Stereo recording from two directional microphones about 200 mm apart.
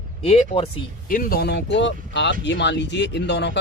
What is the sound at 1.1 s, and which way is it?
Speech, 45° left (ahead or behind).